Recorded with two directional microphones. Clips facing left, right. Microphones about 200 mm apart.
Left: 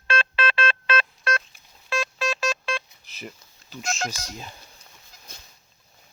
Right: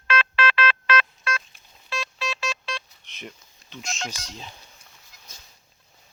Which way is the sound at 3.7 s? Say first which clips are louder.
Left 4 dB; 5° left (ahead or behind).